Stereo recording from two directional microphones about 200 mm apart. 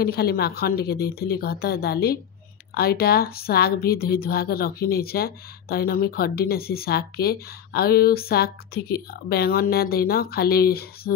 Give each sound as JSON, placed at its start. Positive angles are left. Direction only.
{"t": 0.0, "sound": "speech", "side_deg": 50}